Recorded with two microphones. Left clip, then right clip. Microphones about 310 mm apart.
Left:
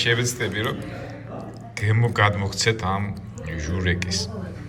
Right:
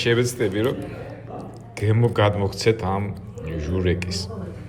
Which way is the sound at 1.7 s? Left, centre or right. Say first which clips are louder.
Right 2 dB; centre.